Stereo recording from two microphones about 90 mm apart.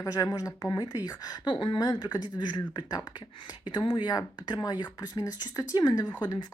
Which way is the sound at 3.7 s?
65° left (ahead or behind).